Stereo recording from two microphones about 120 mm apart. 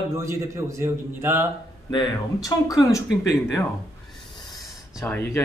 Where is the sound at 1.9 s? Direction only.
35° left (ahead or behind).